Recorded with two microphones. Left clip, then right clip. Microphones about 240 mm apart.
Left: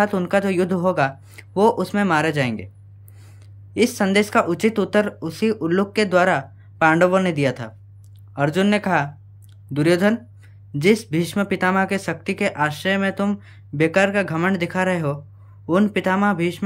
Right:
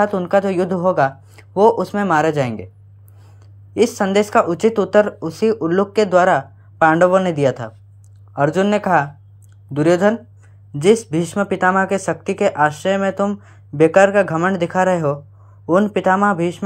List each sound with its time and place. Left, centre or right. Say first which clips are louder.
0.0 s a woman's voice: right 4 dB; centre